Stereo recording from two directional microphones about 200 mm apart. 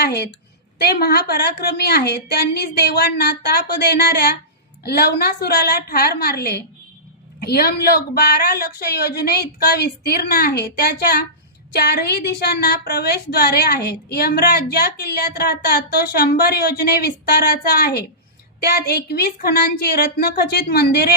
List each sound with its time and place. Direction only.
0.0 s a woman's voice: 55° left (ahead or behind)